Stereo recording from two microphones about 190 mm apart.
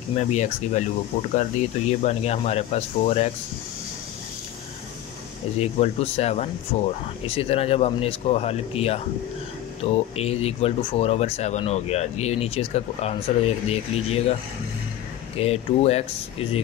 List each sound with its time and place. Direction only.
0.1 s speech: 35° left (ahead or behind)
5.6 s speech: 35° left (ahead or behind)
15.3 s speech: 30° left (ahead or behind)